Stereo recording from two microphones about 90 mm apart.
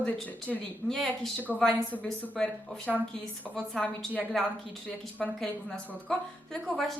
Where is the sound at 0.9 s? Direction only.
5° left (ahead or behind).